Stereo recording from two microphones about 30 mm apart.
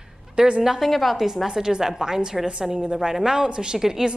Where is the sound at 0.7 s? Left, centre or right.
Centre.